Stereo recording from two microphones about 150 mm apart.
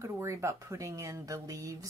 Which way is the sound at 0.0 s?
20° right (ahead or behind).